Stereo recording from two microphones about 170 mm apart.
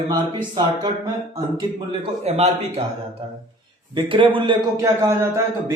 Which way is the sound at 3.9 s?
30° right (ahead or behind).